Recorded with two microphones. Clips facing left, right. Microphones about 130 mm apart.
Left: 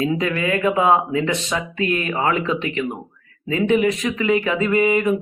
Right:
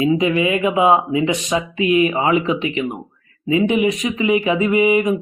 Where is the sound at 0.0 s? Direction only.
15° right (ahead or behind).